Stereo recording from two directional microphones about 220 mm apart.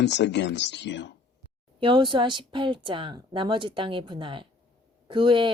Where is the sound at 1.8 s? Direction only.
20° right (ahead or behind).